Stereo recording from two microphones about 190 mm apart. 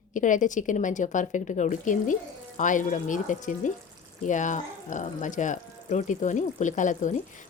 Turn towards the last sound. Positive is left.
turn(degrees=40)  # may be behind; listen again after turning